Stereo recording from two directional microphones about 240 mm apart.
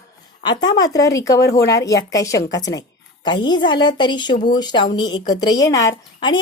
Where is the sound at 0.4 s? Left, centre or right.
Centre.